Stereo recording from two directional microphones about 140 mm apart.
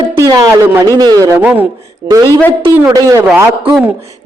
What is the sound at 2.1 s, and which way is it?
A man's voice, 25° right (ahead or behind).